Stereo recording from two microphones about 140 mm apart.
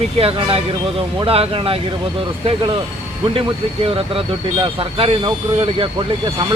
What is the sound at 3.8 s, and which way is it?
Speech, 40° right (ahead or behind).